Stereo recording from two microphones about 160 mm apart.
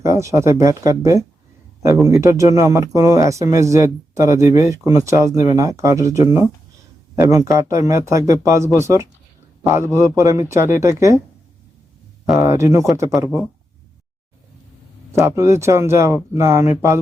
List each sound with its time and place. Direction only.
0.0 s speech: 20° right (ahead or behind)
2.2 s speech: 20° right (ahead or behind)
12.4 s speech: 20° right (ahead or behind)
15.2 s speech: 15° right (ahead or behind)